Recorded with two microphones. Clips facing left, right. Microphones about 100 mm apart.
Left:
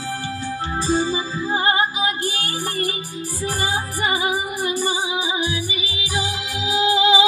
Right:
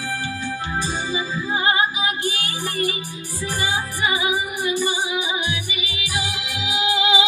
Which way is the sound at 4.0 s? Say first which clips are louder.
Left 1 dB; 35° left (ahead or behind).